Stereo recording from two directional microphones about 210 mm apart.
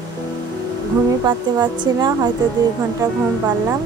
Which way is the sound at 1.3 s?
20° right (ahead or behind).